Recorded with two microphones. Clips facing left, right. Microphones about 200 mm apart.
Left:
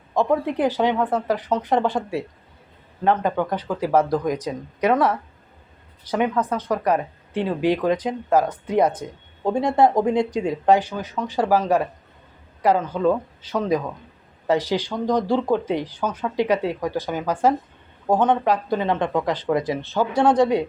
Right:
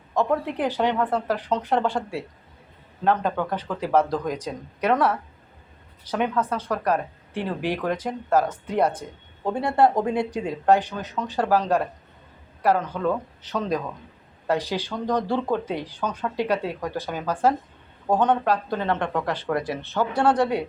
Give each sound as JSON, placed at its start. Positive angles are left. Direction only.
{"t": 0.1, "sound": "speech", "side_deg": 10}
{"t": 9.0, "sound": "speech", "side_deg": 70}
{"t": 9.4, "sound": "speech", "side_deg": 15}